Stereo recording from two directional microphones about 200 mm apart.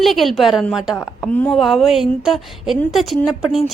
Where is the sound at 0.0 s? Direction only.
Centre (ahead or behind).